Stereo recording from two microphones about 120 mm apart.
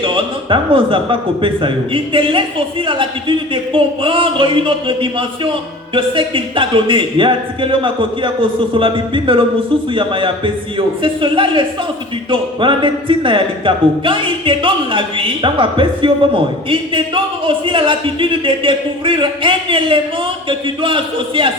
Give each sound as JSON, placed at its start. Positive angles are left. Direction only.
{"t": 0.0, "sound": "a man's voice", "side_deg": -45}